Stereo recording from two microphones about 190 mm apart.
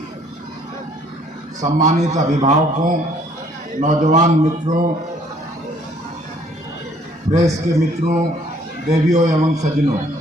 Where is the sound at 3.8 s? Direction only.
40° right (ahead or behind).